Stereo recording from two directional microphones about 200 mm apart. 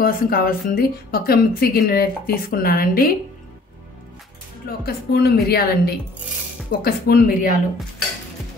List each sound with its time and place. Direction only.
0.0 s speech: 45° left (ahead or behind)
4.6 s speech: 50° left (ahead or behind)